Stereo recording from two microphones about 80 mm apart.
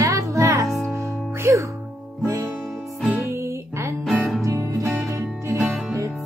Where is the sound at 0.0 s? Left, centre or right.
Right.